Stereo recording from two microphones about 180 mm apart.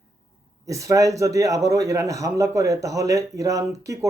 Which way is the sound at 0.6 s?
20° right (ahead or behind).